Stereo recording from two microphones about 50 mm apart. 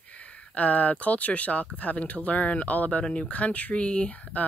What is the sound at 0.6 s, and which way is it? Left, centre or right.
Speech, left.